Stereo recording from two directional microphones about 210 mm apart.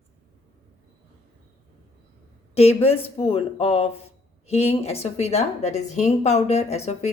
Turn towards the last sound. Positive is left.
turn(degrees=30)  # may be behind; listen again after turning